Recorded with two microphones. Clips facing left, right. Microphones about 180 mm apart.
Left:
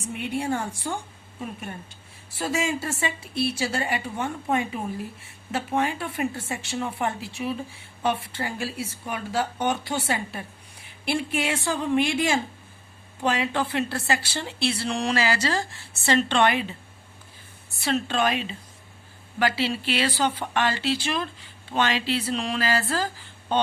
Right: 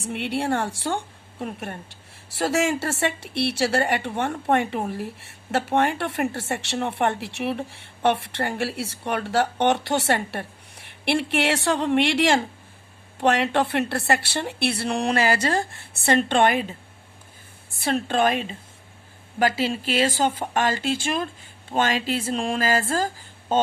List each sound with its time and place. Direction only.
0.1 s a woman's voice: 75° right (ahead or behind); by 16.6 s 45° right (ahead or behind)
17.7 s a woman's voice: 50° right (ahead or behind)